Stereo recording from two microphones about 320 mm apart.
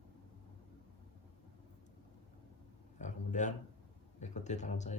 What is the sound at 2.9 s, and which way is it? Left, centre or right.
Speech, left.